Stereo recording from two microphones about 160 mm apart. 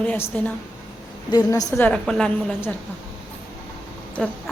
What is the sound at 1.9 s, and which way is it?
Speech, 5° left (ahead or behind).